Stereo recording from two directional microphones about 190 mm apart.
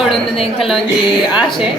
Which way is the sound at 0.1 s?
30° left (ahead or behind).